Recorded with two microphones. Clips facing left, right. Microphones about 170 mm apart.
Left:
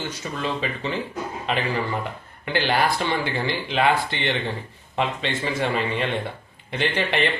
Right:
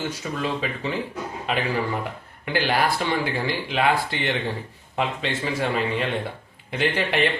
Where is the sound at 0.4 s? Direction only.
5° right (ahead or behind).